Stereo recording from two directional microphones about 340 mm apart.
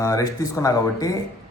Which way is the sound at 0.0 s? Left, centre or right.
Centre.